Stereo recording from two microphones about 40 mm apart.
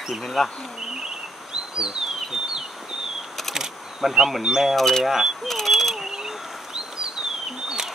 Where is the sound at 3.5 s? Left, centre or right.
Centre.